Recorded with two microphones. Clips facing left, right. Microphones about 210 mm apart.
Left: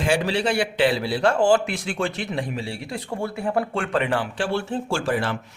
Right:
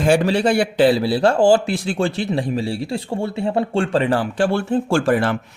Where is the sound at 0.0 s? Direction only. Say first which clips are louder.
Right 6 dB; 45° right (ahead or behind).